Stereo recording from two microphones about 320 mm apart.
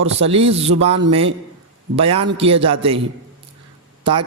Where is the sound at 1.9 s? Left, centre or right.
Centre.